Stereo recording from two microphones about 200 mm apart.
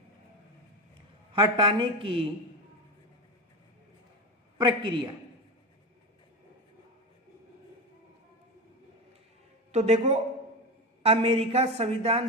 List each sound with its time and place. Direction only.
1.3 s a woman's voice: 25° right (ahead or behind)
4.5 s a woman's voice: 25° right (ahead or behind)
9.7 s a woman's voice: 35° right (ahead or behind)